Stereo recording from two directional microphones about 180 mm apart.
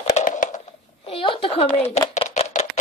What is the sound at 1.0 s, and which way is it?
Speech, 30° left (ahead or behind).